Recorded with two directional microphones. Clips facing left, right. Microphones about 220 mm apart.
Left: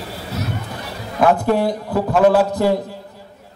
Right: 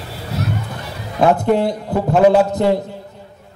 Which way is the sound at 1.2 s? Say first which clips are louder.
Right 1 dB; 20° right (ahead or behind).